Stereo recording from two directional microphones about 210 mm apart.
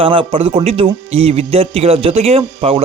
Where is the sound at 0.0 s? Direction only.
25° right (ahead or behind).